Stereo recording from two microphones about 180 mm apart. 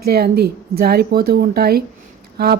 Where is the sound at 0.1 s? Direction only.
60° right (ahead or behind).